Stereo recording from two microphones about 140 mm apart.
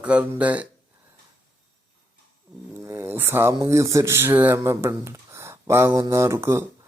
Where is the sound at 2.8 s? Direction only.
20° right (ahead or behind).